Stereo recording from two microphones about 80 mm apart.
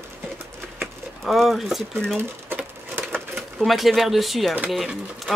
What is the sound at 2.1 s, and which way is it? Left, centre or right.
Cash register, right.